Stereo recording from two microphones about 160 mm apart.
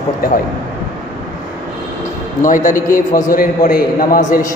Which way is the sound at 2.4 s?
55° left (ahead or behind).